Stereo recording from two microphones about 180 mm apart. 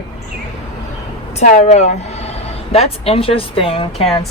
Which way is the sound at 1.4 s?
45° left (ahead or behind).